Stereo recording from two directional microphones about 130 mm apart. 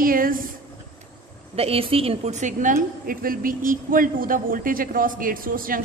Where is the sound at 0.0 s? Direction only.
90° right.